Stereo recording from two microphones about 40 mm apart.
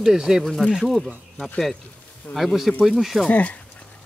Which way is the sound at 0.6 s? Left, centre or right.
Centre.